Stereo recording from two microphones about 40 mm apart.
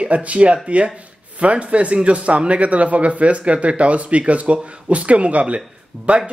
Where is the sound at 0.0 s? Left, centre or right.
Right.